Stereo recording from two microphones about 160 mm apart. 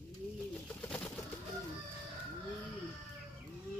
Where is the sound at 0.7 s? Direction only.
10° left (ahead or behind).